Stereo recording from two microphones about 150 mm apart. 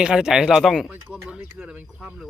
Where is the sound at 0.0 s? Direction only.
5° right (ahead or behind).